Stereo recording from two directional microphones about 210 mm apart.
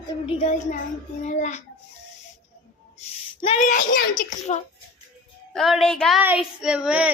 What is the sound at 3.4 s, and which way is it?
Speech, 25° left (ahead or behind).